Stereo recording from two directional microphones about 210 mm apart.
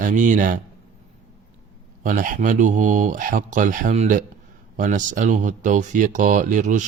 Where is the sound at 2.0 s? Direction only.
40° right (ahead or behind).